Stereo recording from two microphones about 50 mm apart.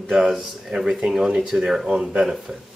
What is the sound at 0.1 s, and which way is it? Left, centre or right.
Speech, centre.